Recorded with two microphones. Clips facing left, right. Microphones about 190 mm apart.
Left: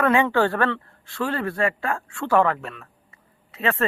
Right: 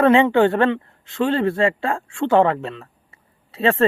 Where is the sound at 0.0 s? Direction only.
25° right (ahead or behind).